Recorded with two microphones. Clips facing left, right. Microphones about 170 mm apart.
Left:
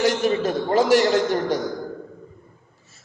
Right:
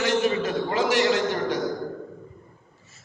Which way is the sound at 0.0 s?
40° left (ahead or behind).